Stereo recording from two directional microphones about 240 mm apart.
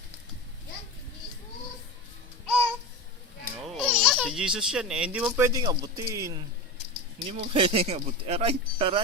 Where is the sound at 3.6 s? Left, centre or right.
Centre.